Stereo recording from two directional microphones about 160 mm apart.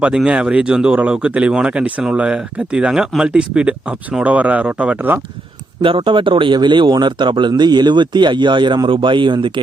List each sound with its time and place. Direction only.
0.0 s speech: 5° right (ahead or behind)
5.8 s speech: 35° right (ahead or behind)